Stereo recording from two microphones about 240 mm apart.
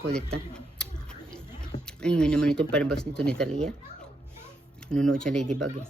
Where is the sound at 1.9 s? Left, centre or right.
Centre.